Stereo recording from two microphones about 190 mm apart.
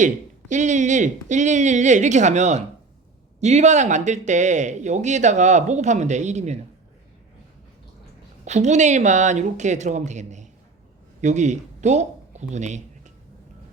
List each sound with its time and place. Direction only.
0.0 s speech: 40° right (ahead or behind)
8.4 s speech: 40° right (ahead or behind)